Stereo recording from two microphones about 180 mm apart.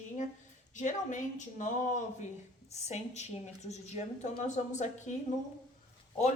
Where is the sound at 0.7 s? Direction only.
45° left (ahead or behind).